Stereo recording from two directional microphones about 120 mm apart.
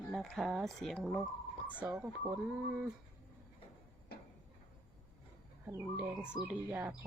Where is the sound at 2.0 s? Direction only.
15° right (ahead or behind).